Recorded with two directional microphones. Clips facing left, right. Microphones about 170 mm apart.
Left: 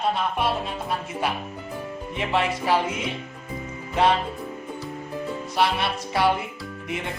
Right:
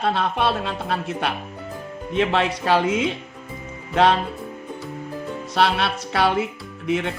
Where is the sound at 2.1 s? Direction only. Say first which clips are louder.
Right 4 dB; 90° right.